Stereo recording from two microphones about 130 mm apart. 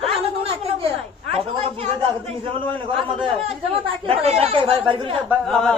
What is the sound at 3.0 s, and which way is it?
Speech, 45° right (ahead or behind).